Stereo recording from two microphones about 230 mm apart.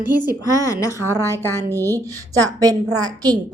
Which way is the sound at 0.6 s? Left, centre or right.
Centre.